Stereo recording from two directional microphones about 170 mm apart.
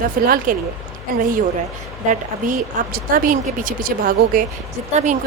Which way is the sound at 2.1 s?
55° right (ahead or behind).